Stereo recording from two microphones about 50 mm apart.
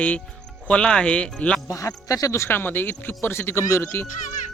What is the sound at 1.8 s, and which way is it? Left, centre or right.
Speech, left.